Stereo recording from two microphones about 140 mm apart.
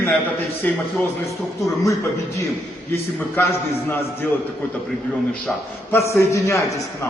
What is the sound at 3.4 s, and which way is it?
Speech, 15° left (ahead or behind).